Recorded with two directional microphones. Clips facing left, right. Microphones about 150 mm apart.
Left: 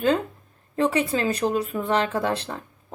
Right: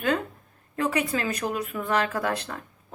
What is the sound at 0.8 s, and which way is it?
Speech, 30° left (ahead or behind).